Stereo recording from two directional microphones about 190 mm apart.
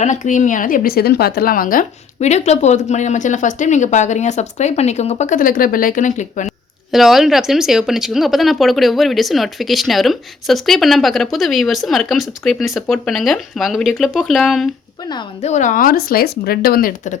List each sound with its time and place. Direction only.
0.0 s a woman's voice: 40° left (ahead or behind)
6.9 s speech: centre (ahead or behind)
15.4 s a woman's voice: 35° left (ahead or behind)